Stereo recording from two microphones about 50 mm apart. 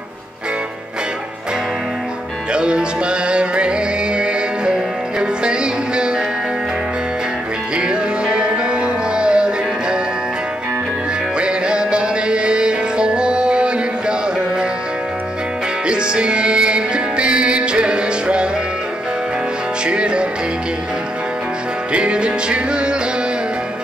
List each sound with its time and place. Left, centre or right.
2.5 s music: centre
7.7 s music: centre
11.3 s music: centre
15.9 s music: centre
19.9 s music: centre
21.9 s music: centre